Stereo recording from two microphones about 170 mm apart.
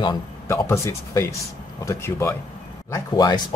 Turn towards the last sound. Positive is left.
turn(degrees=20)  # may be behind; listen again after turning